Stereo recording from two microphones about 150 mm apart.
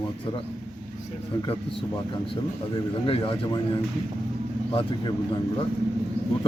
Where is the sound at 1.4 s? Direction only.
30° left (ahead or behind).